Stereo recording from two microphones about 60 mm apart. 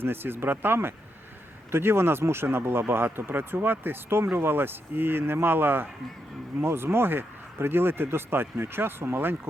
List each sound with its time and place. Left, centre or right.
0.0 s speech: right